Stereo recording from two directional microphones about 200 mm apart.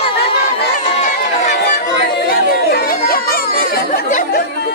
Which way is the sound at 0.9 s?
35° left (ahead or behind).